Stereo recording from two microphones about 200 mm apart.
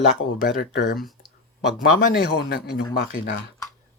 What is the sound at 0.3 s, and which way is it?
Speech, 50° left (ahead or behind).